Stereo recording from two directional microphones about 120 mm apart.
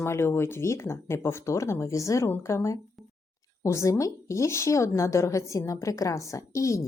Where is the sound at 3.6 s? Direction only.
25° left (ahead or behind).